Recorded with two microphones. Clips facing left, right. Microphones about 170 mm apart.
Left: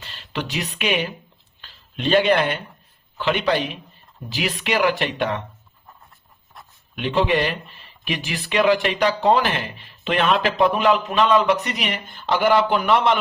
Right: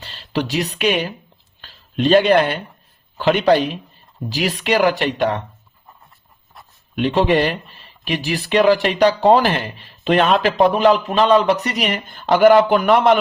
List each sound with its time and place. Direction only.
0.0 s speech: 35° right (ahead or behind)
6.9 s speech: 35° right (ahead or behind)